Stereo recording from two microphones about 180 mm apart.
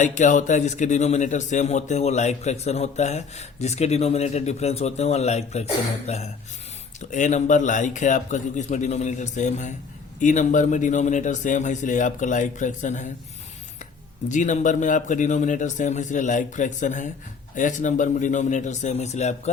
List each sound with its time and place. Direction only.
0.0 s a man's voice: 45° left (ahead or behind)
14.3 s speech: 45° left (ahead or behind)